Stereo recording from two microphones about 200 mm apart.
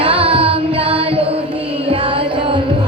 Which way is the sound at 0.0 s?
30° right (ahead or behind).